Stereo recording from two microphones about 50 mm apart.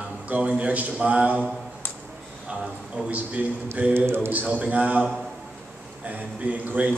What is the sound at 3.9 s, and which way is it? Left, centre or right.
Speech, right.